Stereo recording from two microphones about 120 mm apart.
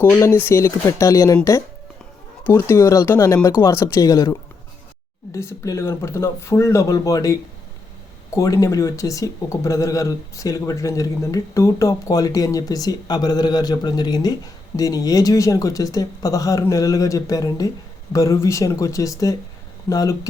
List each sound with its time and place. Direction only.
0.0 s speech: 20° left (ahead or behind)
2.4 s speech: 25° left (ahead or behind)
8.4 s speech: 25° left (ahead or behind)